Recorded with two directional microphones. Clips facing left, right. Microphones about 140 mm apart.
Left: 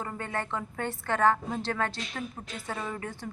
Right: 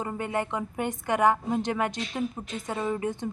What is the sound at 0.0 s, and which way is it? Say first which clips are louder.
A woman's voice: right 5 dB; 15° right (ahead or behind).